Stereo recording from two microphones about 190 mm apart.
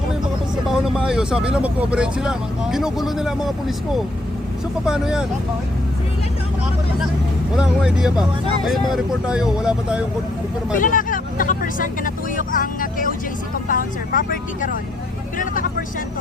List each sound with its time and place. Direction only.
0.7 s speech: 5° right (ahead or behind)
4.9 s speech: 5° right (ahead or behind)
7.5 s speech: 5° right (ahead or behind)
10.8 s speech: 45° left (ahead or behind)